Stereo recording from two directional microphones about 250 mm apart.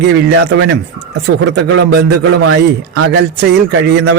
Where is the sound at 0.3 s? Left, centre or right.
Right.